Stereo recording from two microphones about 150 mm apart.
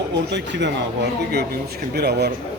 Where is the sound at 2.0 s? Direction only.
90° right.